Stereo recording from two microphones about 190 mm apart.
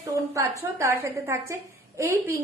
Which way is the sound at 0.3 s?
15° right (ahead or behind).